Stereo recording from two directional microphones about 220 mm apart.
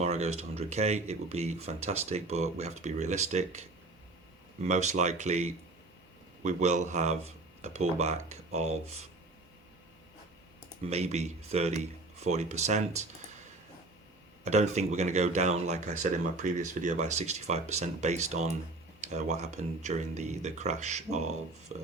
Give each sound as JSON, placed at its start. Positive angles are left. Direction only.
{"t": 0.0, "sound": "speech", "side_deg": -30}
{"t": 4.7, "sound": "speech", "side_deg": -30}
{"t": 10.8, "sound": "speech", "side_deg": -30}
{"t": 14.4, "sound": "speech", "side_deg": -30}